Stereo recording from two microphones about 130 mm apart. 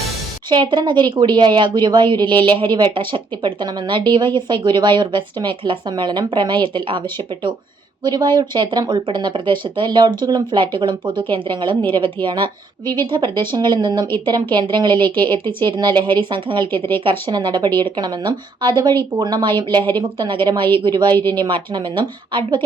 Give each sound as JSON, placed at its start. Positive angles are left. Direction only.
{"t": 0.5, "sound": "speech", "side_deg": -35}